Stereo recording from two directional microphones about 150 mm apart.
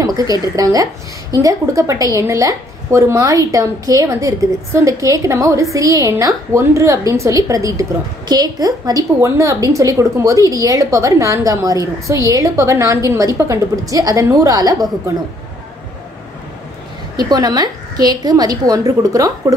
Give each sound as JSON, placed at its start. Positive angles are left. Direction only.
{"t": 0.0, "sound": "a woman's voice", "side_deg": -25}
{"t": 17.3, "sound": "a woman's voice", "side_deg": -25}